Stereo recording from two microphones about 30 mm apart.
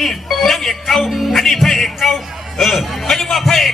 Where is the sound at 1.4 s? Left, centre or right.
Centre.